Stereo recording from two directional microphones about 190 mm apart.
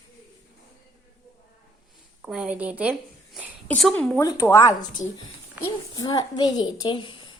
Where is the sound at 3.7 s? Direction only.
5° left (ahead or behind); by 5.0 s 20° left (ahead or behind).